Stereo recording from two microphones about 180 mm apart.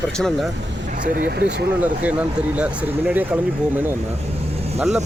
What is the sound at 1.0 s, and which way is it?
Speech, 50° right (ahead or behind).